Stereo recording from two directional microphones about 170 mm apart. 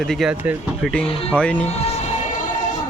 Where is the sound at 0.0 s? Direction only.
Centre (ahead or behind).